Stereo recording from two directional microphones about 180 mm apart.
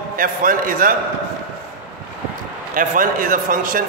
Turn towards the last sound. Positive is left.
turn(degrees=-50)  # may be behind; listen again after turning